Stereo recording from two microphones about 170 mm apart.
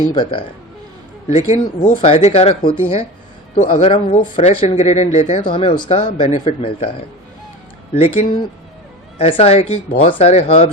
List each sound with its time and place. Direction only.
0.1 s speech: 30° left (ahead or behind)
5.4 s speech: 30° left (ahead or behind)
7.9 s speech: 35° left (ahead or behind)